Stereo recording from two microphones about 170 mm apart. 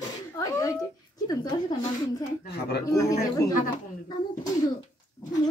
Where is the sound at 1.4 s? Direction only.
25° left (ahead or behind).